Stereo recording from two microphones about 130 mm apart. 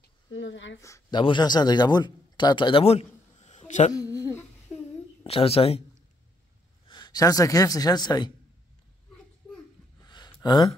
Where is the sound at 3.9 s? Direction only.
25° left (ahead or behind).